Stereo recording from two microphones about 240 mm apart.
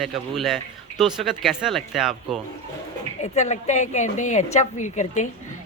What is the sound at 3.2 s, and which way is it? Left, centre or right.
A woman's voice, left.